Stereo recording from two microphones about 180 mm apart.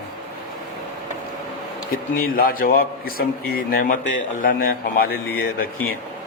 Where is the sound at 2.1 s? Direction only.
55° left (ahead or behind).